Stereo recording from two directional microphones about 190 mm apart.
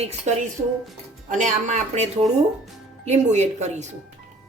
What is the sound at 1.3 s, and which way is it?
A woman's voice, 40° right (ahead or behind).